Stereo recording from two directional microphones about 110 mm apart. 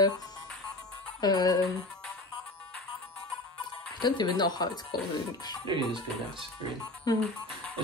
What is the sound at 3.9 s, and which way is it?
Speech, 40° left (ahead or behind).